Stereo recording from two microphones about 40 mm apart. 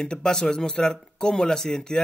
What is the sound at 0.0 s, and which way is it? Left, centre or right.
A man's voice, centre.